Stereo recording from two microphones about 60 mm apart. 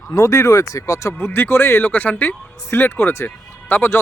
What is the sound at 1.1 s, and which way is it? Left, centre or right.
Speech, left.